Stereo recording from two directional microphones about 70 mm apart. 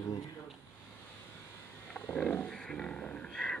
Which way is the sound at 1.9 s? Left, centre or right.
Left.